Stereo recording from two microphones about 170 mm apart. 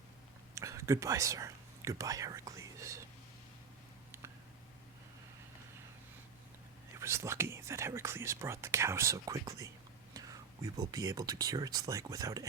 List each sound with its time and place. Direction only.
0.5 s whispering: 20° right (ahead or behind)
6.9 s speech: 15° right (ahead or behind)